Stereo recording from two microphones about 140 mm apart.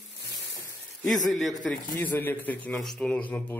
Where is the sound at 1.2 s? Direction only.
Centre (ahead or behind).